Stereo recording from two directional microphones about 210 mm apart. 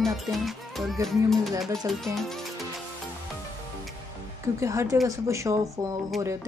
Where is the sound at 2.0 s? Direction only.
Centre (ahead or behind).